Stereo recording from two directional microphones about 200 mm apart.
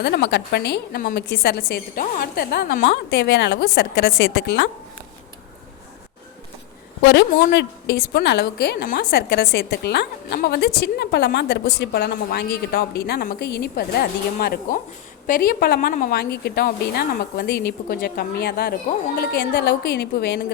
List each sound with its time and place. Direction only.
0.0 s a woman's voice: 55° left (ahead or behind)
7.0 s a woman's voice: 60° left (ahead or behind)